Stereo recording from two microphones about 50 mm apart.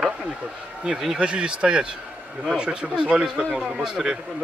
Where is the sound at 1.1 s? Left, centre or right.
Centre.